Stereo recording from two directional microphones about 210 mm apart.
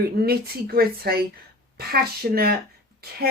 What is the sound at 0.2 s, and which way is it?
Speech, 45° right (ahead or behind).